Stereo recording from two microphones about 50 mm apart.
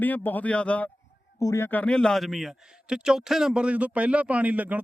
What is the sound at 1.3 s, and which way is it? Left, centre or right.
Speech, left.